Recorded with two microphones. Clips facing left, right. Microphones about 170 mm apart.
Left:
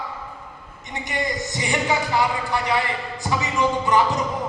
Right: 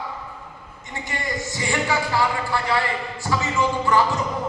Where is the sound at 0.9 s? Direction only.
20° left (ahead or behind).